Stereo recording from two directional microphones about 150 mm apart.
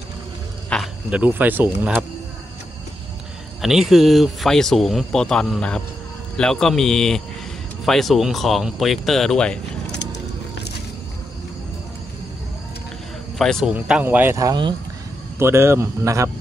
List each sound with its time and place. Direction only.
0.7 s insect: 5° left (ahead or behind)
1.1 s speech: 10° right (ahead or behind)
3.6 s speech: centre (ahead or behind)
13.4 s speech: centre (ahead or behind)
13.7 s speech: 10° right (ahead or behind); by 14.8 s 30° right (ahead or behind)
15.3 s speech: 15° right (ahead or behind)